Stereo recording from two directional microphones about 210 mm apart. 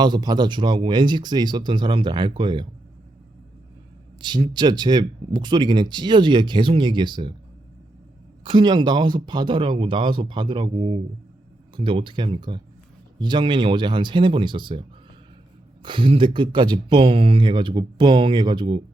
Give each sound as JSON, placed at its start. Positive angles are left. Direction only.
{"t": 0.0, "sound": "speech", "side_deg": -20}
{"t": 4.2, "sound": "speech", "side_deg": -25}
{"t": 8.4, "sound": "speech", "side_deg": -20}